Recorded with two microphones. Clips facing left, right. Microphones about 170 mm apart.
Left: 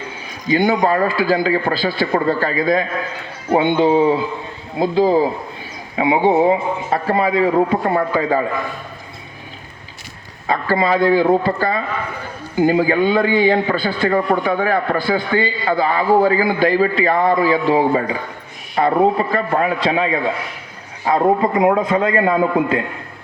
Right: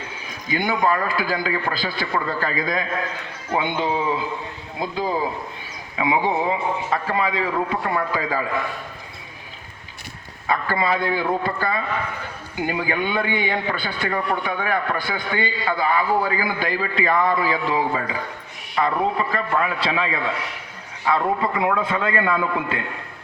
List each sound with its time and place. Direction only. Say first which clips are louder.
0.7 s a man's voice: left 5 dB; 40° left (ahead or behind)
10.4 s a man's voice: left 5 dB; 30° left (ahead or behind)